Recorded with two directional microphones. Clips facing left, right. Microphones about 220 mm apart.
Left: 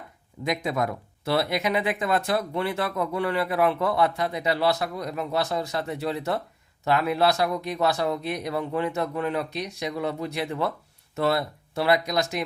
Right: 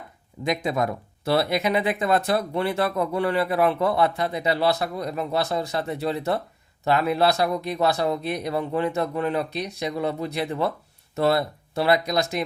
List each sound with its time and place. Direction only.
0.4 s speech: 25° right (ahead or behind)